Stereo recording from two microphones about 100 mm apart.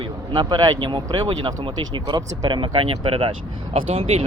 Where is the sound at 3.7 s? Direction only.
85° right.